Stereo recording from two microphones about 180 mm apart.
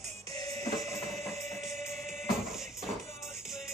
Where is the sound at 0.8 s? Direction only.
Centre (ahead or behind).